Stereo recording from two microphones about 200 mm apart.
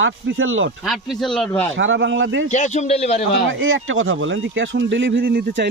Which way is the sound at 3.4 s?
75° right (ahead or behind).